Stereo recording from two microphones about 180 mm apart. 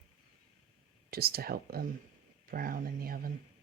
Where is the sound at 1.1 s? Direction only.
60° right (ahead or behind).